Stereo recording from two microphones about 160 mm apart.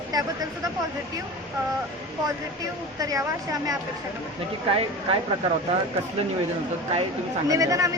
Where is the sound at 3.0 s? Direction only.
20° right (ahead or behind).